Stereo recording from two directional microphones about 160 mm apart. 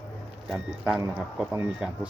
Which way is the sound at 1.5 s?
10° right (ahead or behind).